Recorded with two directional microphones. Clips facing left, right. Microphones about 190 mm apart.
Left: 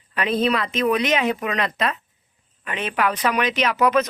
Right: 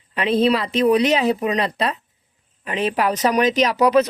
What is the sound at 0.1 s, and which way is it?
Speech, 30° right (ahead or behind).